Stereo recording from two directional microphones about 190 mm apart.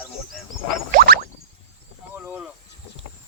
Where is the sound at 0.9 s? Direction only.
50° right (ahead or behind).